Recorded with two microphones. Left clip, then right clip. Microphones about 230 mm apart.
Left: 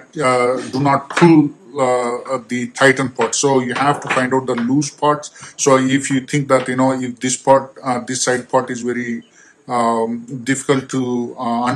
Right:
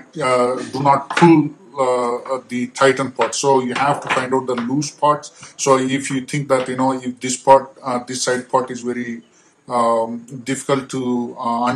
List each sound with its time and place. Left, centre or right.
0.1 s speech: left
1.8 s speech: left